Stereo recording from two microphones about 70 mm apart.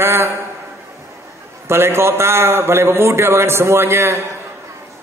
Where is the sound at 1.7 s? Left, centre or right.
Right.